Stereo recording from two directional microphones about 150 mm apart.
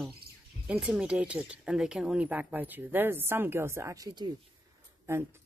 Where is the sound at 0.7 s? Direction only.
5° right (ahead or behind); by 4.3 s 25° right (ahead or behind).